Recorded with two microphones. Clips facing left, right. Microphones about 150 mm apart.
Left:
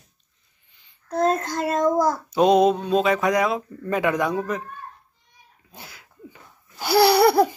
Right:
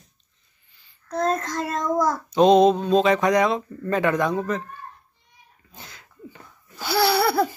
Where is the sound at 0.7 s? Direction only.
20° left (ahead or behind).